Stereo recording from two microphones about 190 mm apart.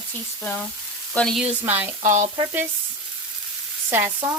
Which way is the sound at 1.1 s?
Centre (ahead or behind).